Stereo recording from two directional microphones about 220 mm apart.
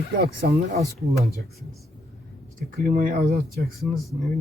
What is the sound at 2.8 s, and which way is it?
Speech, 40° right (ahead or behind).